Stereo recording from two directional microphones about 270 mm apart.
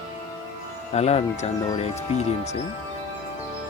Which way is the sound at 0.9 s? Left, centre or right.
Left.